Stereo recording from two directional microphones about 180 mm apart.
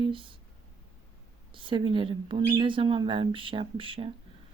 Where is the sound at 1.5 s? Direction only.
25° right (ahead or behind).